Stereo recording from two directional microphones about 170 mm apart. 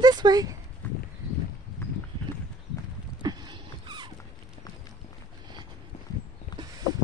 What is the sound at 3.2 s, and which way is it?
Dog, 25° right (ahead or behind).